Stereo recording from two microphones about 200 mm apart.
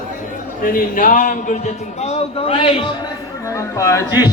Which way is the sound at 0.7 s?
45° left (ahead or behind).